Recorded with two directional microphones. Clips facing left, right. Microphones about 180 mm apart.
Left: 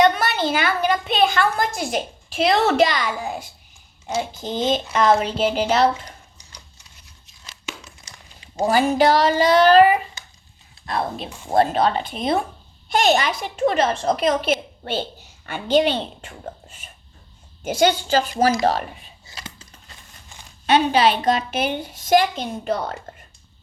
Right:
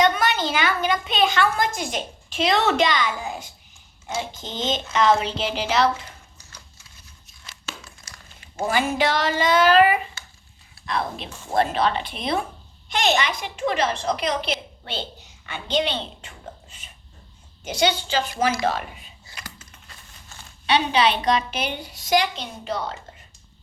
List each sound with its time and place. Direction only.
0.1 s a woman's voice: 40° left (ahead or behind)
4.4 s a woman's voice: 40° left (ahead or behind)
7.6 s crumpling: 15° left (ahead or behind)
8.6 s a woman's voice: 35° left (ahead or behind)
11.5 s a woman's voice: 40° left (ahead or behind)
17.6 s a woman's voice: 45° left (ahead or behind)
19.3 s a sound: 25° left (ahead or behind)
20.7 s a woman's voice: 50° left (ahead or behind)